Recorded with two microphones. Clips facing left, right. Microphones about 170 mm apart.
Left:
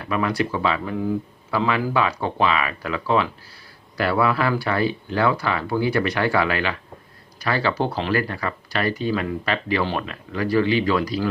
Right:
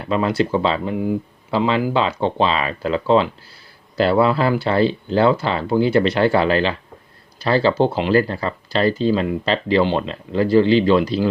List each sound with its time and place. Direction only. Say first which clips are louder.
0.0 s speech: right 4 dB; 25° right (ahead or behind)